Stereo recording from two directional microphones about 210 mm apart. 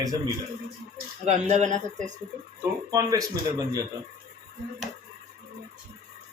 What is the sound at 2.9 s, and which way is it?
Speech, 15° right (ahead or behind).